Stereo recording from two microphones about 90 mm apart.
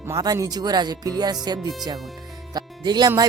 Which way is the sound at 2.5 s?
50° right (ahead or behind).